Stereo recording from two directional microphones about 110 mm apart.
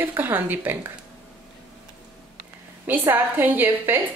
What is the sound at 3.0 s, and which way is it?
Speech, 20° right (ahead or behind).